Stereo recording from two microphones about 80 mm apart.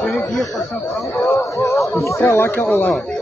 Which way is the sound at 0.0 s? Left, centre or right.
Left.